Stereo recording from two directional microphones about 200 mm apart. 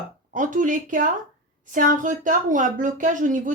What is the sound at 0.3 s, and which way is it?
A man's voice, 40° right (ahead or behind).